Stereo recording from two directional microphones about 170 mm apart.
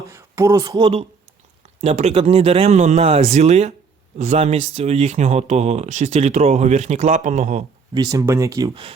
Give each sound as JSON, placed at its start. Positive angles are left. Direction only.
{"t": 0.1, "sound": "speech", "side_deg": -20}
{"t": 7.9, "sound": "speech", "side_deg": -20}